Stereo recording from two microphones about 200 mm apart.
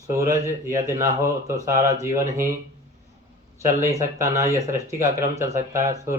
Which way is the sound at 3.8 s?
15° right (ahead or behind).